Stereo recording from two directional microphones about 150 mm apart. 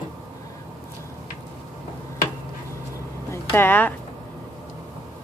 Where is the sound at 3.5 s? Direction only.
15° left (ahead or behind).